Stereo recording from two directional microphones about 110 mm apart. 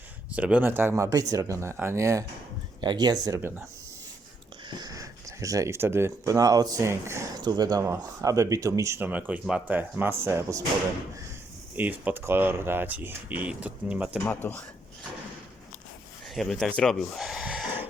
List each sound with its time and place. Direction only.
0.3 s speech: 10° right (ahead or behind)
2.8 s speech: 40° right (ahead or behind)
4.7 s speech: 35° right (ahead or behind)
9.0 s speech: 15° right (ahead or behind)
11.8 s speech: 15° right (ahead or behind)
14.3 s speech: 15° left (ahead or behind)
16.3 s speech: centre (ahead or behind)